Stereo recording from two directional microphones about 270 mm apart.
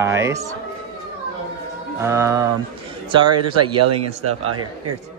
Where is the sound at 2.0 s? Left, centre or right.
Centre.